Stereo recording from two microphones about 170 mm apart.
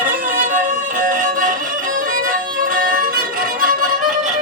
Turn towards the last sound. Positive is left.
turn(degrees=-55)  # may be behind; listen again after turning